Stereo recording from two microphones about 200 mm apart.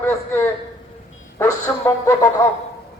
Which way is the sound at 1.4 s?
15° left (ahead or behind).